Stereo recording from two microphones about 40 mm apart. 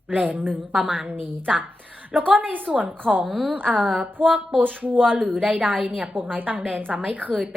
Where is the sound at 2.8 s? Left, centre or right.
Right.